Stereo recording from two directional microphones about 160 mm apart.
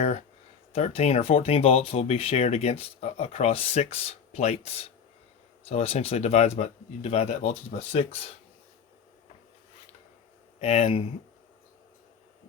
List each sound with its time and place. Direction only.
0.7 s speech: 40° left (ahead or behind)
10.6 s speech: 40° left (ahead or behind)